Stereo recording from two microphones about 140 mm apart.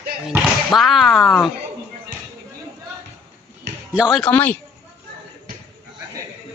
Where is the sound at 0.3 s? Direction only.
Centre (ahead or behind).